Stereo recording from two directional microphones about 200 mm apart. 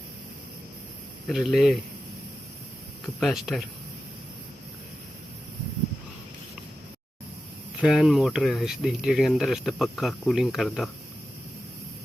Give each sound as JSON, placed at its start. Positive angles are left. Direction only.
{"t": 1.3, "sound": "speech", "side_deg": 0}
{"t": 3.2, "sound": "speech", "side_deg": 0}
{"t": 7.8, "sound": "speech", "side_deg": 0}